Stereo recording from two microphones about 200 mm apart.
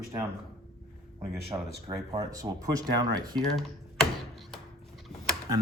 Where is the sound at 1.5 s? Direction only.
20° right (ahead or behind).